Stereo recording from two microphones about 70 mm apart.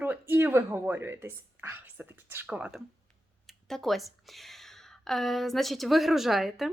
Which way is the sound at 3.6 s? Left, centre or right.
Centre.